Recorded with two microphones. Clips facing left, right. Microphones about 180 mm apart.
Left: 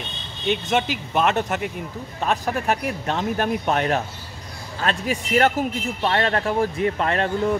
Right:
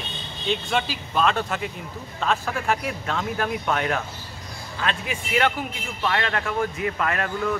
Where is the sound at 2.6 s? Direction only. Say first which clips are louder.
Even; 25° left (ahead or behind).